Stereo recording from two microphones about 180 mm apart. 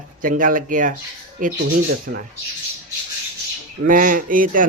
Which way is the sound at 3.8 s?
50° right (ahead or behind).